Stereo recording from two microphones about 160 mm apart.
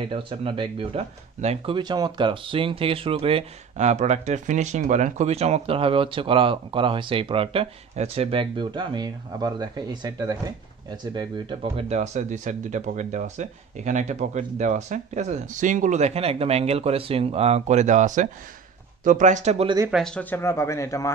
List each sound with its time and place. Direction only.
0.1 s speech: 35° right (ahead or behind)
1.8 s speech: 25° right (ahead or behind); by 19.7 s 40° right (ahead or behind)
19.9 s speech: 5° left (ahead or behind); by 21.1 s 20° left (ahead or behind)